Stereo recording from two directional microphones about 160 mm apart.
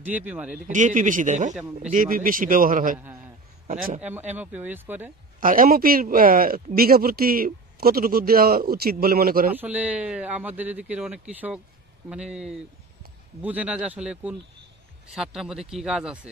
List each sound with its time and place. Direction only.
0.0 s speech: 10° right (ahead or behind)
0.7 s a man's voice: 50° right (ahead or behind)
3.6 s a man's voice: 50° right (ahead or behind)
4.0 s speech: 10° right (ahead or behind)
5.4 s a man's voice: 60° right (ahead or behind)
9.5 s speech: 10° right (ahead or behind)